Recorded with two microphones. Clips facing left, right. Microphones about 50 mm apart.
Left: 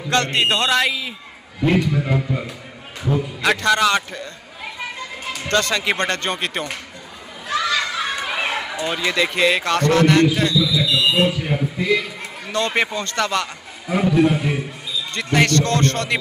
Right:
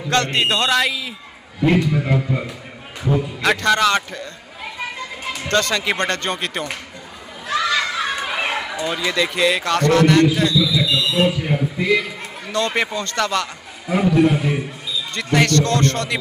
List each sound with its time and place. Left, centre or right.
0.1 s a man's voice: centre
1.6 s a man's voice: centre
5.3 s music: centre
5.6 s a man's voice: centre
7.5 s children playing: centre
8.8 s a man's voice: centre
11.1 s a sound: centre
12.5 s a man's voice: centre
13.8 s a man's voice: centre
15.5 s speech: left